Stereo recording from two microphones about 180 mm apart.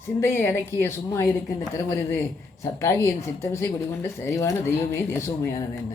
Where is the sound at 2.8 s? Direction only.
15° left (ahead or behind).